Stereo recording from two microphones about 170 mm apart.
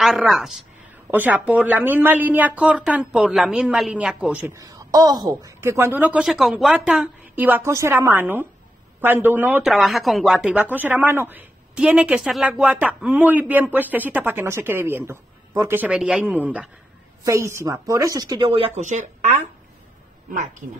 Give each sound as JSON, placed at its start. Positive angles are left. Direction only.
{"t": 0.0, "sound": "a woman's voice", "side_deg": 0}
{"t": 4.6, "sound": "a woman's voice", "side_deg": -20}
{"t": 18.8, "sound": "speech", "side_deg": -45}